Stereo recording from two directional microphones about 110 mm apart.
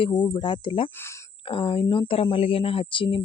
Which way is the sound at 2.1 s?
55° left (ahead or behind).